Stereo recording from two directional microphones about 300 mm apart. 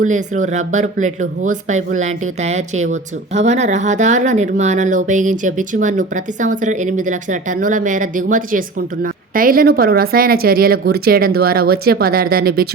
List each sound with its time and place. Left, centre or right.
0.0 s speech: right